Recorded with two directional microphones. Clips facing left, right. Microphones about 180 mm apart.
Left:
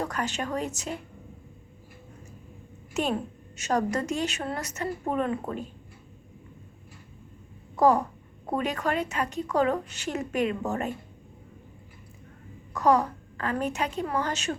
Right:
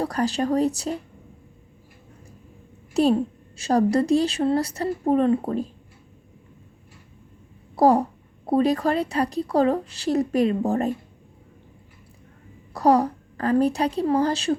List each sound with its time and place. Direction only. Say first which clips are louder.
0.0 s a woman's voice: right 7 dB; 35° right (ahead or behind)
2.9 s a woman's voice: right 9 dB; 35° right (ahead or behind)
7.8 s a woman's voice: right 4 dB; 35° right (ahead or behind)
12.7 s a woman's voice: right 4 dB; 35° right (ahead or behind)